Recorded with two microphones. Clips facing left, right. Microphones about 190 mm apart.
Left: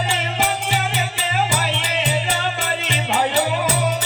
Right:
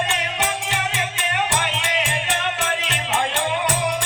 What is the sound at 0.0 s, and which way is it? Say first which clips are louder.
Music: left 3 dB; 60° left (ahead or behind).